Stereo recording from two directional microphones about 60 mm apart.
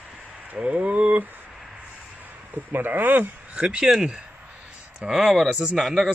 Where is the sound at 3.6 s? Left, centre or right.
Centre.